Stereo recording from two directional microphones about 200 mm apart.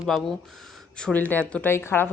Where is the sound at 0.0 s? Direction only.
Centre (ahead or behind).